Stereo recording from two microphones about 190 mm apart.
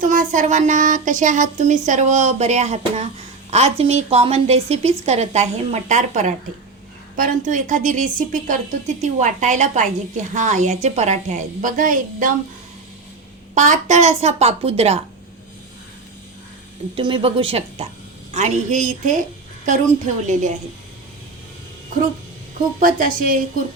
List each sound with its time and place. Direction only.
0.0 s speech: 45° right (ahead or behind)
13.5 s speech: 40° right (ahead or behind)
17.0 s a woman's voice: 25° right (ahead or behind)
22.8 s a woman's voice: 45° right (ahead or behind)